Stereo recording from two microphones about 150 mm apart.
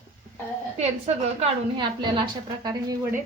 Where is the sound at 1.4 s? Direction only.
30° right (ahead or behind).